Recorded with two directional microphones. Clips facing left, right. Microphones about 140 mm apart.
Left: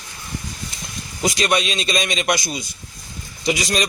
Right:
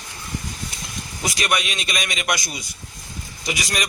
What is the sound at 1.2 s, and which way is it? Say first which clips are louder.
A man's voice: left 4 dB; 25° left (ahead or behind).